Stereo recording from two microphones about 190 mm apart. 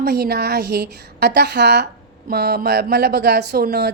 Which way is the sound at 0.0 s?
55° right (ahead or behind).